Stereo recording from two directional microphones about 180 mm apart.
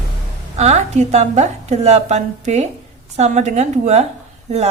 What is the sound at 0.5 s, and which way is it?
A woman's voice, 40° right (ahead or behind).